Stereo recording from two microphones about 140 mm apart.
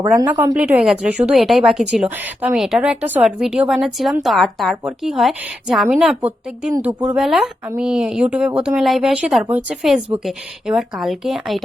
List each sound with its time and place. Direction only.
0.1 s a woman's voice: 15° right (ahead or behind)